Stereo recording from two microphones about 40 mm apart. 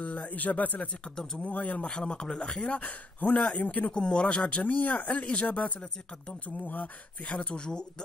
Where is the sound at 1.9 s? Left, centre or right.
Left.